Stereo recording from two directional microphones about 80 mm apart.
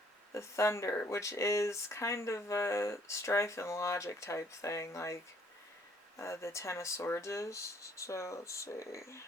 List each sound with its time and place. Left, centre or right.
0.3 s speech: left
6.1 s speech: left